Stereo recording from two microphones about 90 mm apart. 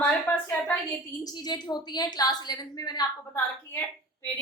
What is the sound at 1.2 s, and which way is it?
A woman's voice, 50° left (ahead or behind).